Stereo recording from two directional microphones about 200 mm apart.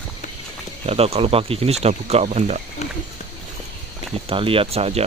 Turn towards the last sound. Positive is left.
turn(degrees=-30)  # may be behind; listen again after turning